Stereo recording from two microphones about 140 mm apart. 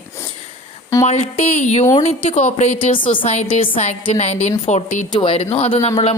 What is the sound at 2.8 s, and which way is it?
Speech, 40° left (ahead or behind).